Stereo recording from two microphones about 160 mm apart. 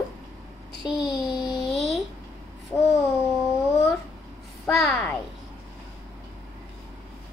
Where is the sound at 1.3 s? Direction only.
25° left (ahead or behind).